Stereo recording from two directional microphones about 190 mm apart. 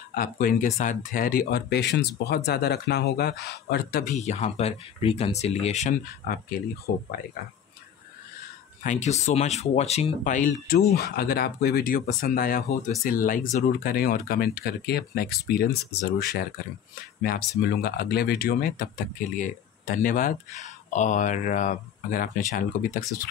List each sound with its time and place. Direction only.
0.1 s speech: 50° left (ahead or behind)
6.9 s speech: 50° left (ahead or behind)
8.8 s speech: 40° left (ahead or behind)
11.0 s speech: 55° left (ahead or behind)